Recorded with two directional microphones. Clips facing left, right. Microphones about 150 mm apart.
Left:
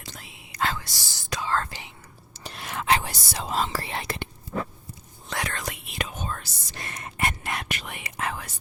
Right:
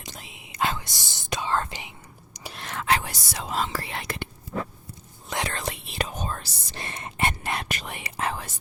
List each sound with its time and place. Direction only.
0.0 s whispering: 20° right (ahead or behind)
2.5 s whispering: 5° left (ahead or behind)
2.7 s speech: 20° left (ahead or behind)
5.3 s whispering: 30° right (ahead or behind)